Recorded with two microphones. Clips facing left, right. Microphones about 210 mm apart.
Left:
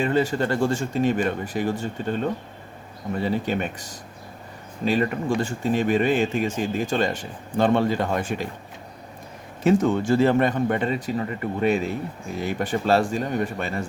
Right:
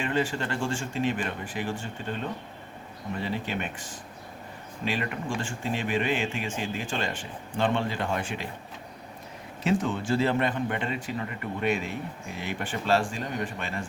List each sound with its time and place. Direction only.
0.0 s speech: 40° left (ahead or behind)
3.2 s speech: 40° left (ahead or behind)
9.6 s speech: 45° left (ahead or behind)